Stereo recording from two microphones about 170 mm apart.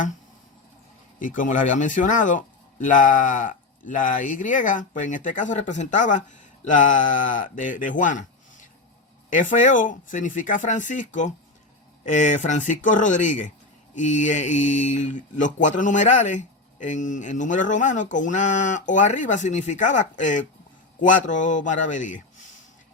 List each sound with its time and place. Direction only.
1.2 s a man's voice: 50° left (ahead or behind)
9.3 s a man's voice: 50° left (ahead or behind)